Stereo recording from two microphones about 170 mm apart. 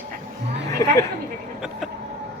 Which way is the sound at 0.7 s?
20° left (ahead or behind).